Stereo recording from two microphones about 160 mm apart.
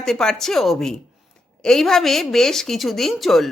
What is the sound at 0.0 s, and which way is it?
A woman's voice, 5° left (ahead or behind).